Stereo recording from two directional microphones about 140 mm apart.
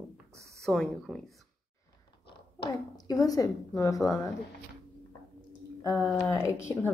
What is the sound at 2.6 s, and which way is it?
A woman's voice, 25° left (ahead or behind).